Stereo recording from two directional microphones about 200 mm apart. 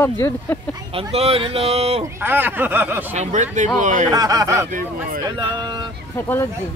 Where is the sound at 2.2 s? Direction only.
10° right (ahead or behind).